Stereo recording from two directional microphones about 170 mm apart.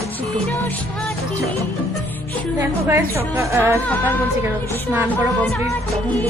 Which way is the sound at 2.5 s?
15° right (ahead or behind).